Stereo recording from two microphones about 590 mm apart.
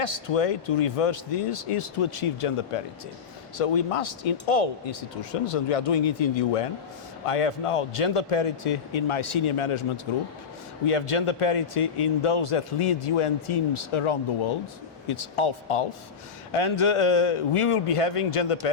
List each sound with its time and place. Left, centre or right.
0.0 s speech: left
10.8 s speech: left